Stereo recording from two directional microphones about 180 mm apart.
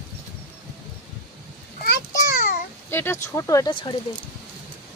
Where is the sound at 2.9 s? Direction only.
15° left (ahead or behind).